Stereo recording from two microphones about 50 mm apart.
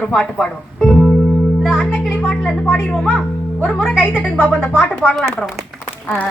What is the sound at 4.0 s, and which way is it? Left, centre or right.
Speech, left.